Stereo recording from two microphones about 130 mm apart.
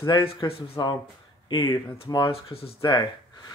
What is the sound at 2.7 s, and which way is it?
Speech, 35° left (ahead or behind).